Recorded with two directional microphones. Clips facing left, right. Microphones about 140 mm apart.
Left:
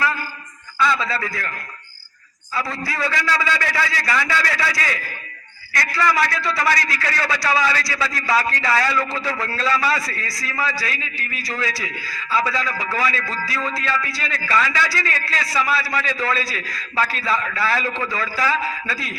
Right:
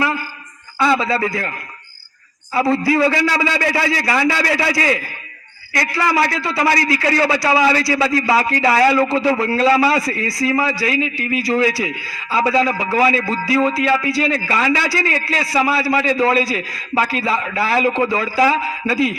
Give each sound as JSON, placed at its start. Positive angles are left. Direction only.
{"t": 0.8, "sound": "a man's voice", "side_deg": -25}
{"t": 2.6, "sound": "a man's voice", "side_deg": -30}